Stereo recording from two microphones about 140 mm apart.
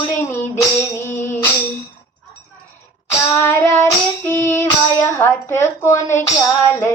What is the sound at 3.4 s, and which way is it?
Child singing, 20° left (ahead or behind).